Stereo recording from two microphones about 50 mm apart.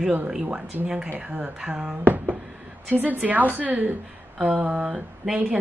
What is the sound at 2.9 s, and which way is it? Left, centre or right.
A woman's voice, right.